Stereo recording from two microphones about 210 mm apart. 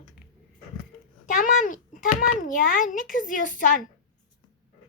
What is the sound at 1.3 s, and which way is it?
A child's voice, 40° left (ahead or behind).